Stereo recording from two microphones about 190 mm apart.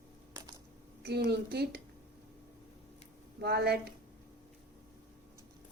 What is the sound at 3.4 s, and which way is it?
Speech, 60° right (ahead or behind).